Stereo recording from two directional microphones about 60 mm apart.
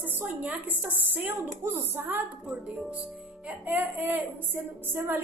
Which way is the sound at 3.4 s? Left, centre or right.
Right.